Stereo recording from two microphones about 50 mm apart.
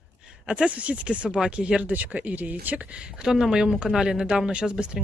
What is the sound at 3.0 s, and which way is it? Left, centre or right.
A woman's voice, centre.